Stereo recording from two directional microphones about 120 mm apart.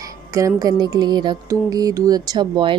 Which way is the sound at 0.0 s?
25° right (ahead or behind).